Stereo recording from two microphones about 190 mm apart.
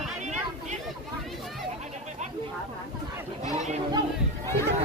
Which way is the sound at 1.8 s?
40° right (ahead or behind).